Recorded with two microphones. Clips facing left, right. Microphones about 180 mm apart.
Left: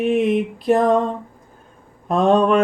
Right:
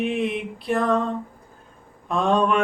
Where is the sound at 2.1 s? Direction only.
40° left (ahead or behind).